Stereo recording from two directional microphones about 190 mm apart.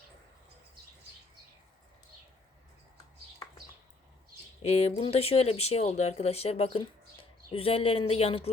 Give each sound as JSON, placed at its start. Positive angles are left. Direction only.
{"t": 4.6, "sound": "speech", "side_deg": 35}